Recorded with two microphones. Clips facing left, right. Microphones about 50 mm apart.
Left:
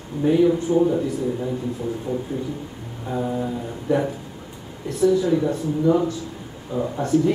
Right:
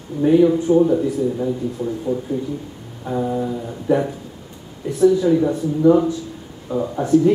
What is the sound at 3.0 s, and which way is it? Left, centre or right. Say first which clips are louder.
A man's voice: right 3 dB; centre.